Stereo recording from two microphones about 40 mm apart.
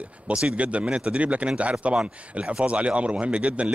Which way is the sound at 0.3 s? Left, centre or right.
Right.